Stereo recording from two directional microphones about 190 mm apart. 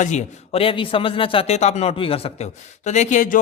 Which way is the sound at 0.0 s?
40° left (ahead or behind).